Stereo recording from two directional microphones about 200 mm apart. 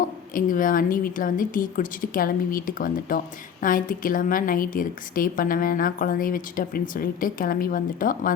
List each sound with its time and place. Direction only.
0.3 s a woman's voice: 40° left (ahead or behind)